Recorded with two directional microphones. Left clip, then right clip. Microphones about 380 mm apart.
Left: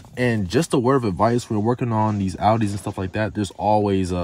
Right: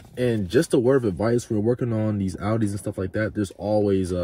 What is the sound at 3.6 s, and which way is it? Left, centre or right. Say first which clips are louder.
Speech: left 3 dB; left.